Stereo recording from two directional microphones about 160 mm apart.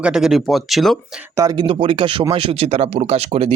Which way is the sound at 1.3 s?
25° right (ahead or behind).